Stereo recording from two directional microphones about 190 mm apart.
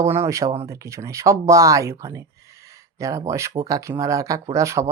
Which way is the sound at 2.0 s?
15° right (ahead or behind).